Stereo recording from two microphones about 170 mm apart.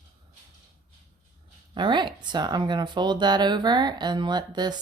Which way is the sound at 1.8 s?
25° right (ahead or behind).